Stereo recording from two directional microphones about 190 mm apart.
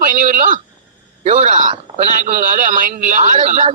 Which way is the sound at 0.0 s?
45° right (ahead or behind).